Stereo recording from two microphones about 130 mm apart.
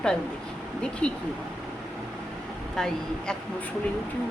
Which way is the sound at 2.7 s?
5° left (ahead or behind).